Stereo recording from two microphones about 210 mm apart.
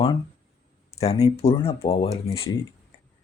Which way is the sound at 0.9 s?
30° left (ahead or behind).